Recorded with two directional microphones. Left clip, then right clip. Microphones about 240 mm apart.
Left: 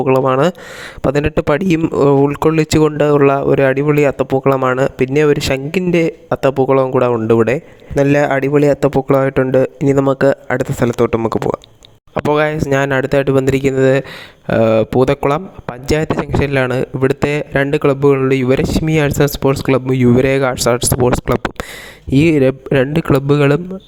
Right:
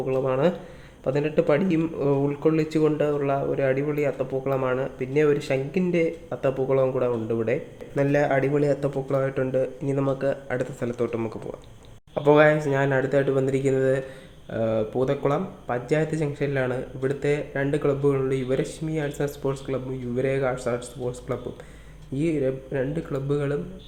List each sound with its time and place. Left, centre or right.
0.0 s speech: left